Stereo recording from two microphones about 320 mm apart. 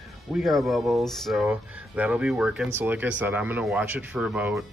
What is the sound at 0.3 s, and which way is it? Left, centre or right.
Speech, centre.